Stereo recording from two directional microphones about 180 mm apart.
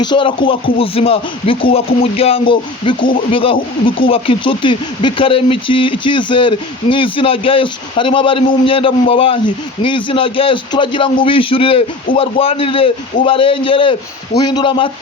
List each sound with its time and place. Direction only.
0.0 s speech: 25° left (ahead or behind)